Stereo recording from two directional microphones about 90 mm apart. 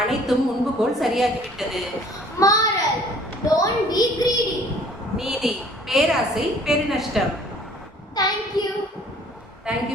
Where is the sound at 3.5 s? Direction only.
45° left (ahead or behind).